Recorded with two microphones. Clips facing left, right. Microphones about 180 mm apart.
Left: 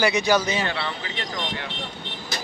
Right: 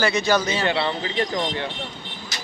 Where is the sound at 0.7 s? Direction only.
30° right (ahead or behind).